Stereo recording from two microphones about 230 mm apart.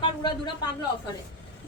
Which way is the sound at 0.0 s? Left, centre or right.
Centre.